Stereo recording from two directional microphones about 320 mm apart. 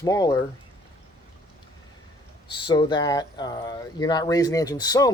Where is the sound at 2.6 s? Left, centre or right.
Centre.